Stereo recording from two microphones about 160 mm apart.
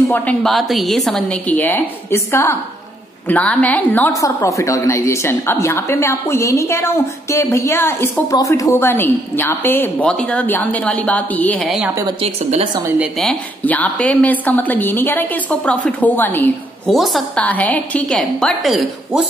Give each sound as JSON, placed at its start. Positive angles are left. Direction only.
{"t": 0.1, "sound": "a woman's voice", "side_deg": 5}
{"t": 11.6, "sound": "a woman's voice", "side_deg": 0}
{"t": 12.2, "sound": "speech", "side_deg": -35}
{"t": 13.0, "sound": "a woman's voice", "side_deg": 0}
{"t": 16.9, "sound": "a woman's voice", "side_deg": 0}